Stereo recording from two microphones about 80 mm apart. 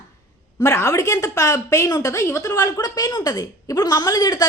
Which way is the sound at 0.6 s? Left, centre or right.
Left.